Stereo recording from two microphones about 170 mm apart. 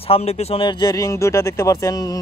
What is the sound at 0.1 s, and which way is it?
A man's voice, 35° left (ahead or behind).